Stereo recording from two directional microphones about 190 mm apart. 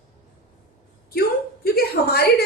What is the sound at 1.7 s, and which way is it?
Speech, 55° left (ahead or behind).